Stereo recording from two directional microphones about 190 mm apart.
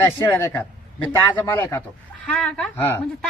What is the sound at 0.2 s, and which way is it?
A woman's voice, 15° left (ahead or behind).